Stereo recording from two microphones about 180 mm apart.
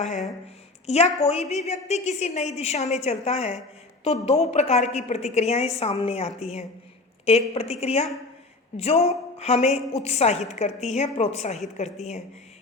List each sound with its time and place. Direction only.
0.9 s a woman's voice: 35° left (ahead or behind)